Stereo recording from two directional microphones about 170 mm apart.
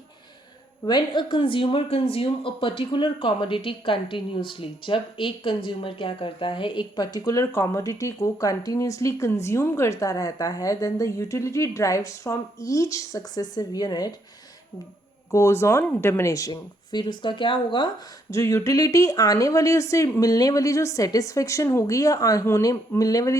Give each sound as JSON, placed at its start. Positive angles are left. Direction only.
{"t": 0.9, "sound": "speech", "side_deg": 25}
{"t": 15.3, "sound": "speech", "side_deg": 15}